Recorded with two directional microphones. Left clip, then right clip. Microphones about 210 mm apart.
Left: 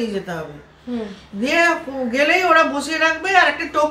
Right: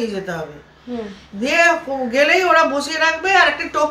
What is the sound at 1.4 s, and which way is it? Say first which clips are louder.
A woman's voice: right 2 dB; 15° right (ahead or behind).